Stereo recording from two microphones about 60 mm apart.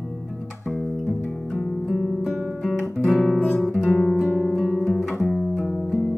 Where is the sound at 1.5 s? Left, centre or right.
Centre.